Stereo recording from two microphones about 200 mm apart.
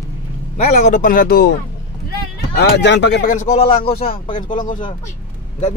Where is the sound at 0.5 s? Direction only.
35° left (ahead or behind).